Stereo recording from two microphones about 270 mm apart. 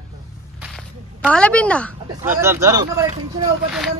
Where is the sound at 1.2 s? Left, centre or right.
Centre.